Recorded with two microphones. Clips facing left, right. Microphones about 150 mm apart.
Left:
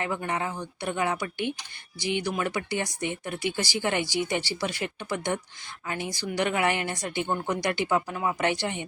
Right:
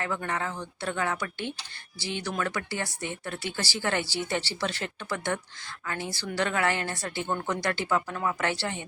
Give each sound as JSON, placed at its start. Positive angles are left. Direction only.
{"t": 0.0, "sound": "speech", "side_deg": 15}